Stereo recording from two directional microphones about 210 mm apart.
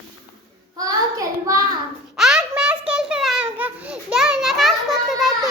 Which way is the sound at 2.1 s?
Centre (ahead or behind).